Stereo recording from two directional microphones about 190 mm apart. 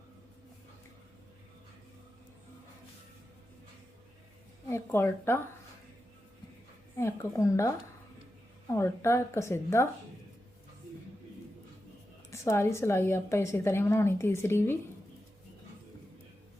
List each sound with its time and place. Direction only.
4.7 s a woman's voice: 10° left (ahead or behind)
7.0 s a woman's voice: 15° left (ahead or behind)
8.7 s a woman's voice: 15° left (ahead or behind)
12.3 s a woman's voice: 15° left (ahead or behind)